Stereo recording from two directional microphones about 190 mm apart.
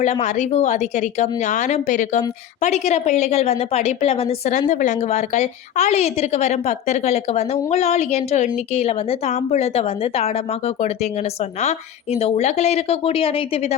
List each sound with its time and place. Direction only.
0.0 s a woman's voice: 35° left (ahead or behind)